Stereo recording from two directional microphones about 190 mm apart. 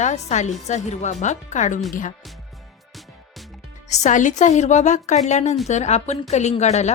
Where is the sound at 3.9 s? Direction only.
40° left (ahead or behind).